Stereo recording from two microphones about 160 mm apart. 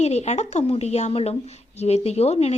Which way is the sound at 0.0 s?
45° left (ahead or behind).